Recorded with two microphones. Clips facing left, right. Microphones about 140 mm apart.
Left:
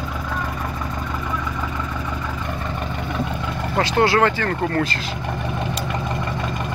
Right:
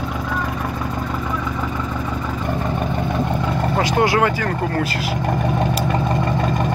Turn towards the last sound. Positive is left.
turn(degrees=-10)  # may be behind; listen again after turning